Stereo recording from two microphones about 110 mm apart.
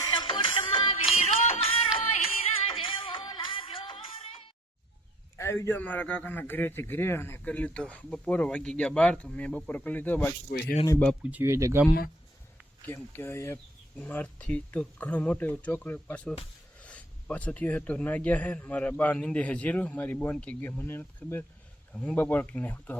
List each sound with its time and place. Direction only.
0.2 s music: 50° left (ahead or behind)
1.1 s music: 75° left (ahead or behind)
2.0 s music: 55° left (ahead or behind)
5.4 s a man's voice: 25° left (ahead or behind)
11.2 s speech: 15° right (ahead or behind)
11.4 s speech: 25° right (ahead or behind)
12.8 s speech: 20° left (ahead or behind)
13.9 s a man's voice: 15° left (ahead or behind)